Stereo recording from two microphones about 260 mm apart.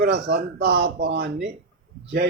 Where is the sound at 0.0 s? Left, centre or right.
Right.